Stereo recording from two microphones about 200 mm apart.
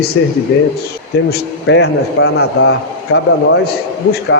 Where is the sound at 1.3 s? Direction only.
60° left (ahead or behind).